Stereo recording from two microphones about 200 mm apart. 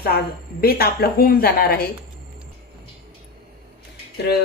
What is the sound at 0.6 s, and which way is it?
Speech, 50° left (ahead or behind).